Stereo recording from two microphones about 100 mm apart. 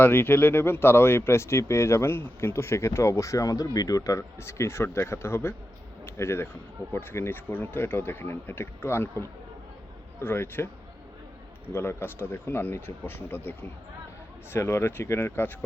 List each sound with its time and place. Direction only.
0.0 s speech: 20° left (ahead or behind)
11.7 s speech: 25° left (ahead or behind)